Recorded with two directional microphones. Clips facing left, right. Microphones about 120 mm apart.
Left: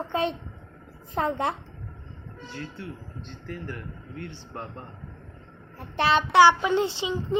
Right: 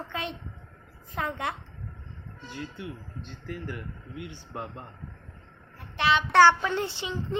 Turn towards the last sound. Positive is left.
turn(degrees=15)  # may be behind; listen again after turning